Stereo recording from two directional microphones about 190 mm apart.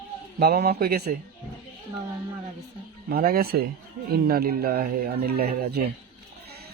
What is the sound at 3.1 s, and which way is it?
Speech, 50° right (ahead or behind).